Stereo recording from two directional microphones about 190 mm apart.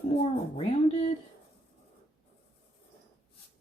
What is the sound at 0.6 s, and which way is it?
Speech, 30° left (ahead or behind).